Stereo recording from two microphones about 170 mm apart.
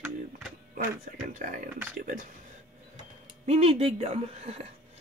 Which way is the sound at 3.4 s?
35° right (ahead or behind).